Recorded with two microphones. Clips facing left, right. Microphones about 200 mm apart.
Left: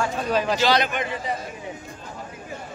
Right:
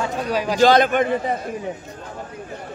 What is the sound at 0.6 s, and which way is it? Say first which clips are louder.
Speech: right 7 dB; 50° right (ahead or behind).